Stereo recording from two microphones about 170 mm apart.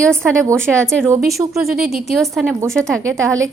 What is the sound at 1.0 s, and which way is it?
Speech, 15° right (ahead or behind).